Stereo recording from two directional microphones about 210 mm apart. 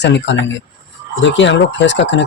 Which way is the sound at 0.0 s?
55° left (ahead or behind).